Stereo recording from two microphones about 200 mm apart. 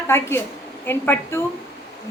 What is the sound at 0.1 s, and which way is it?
A woman's voice, 10° left (ahead or behind).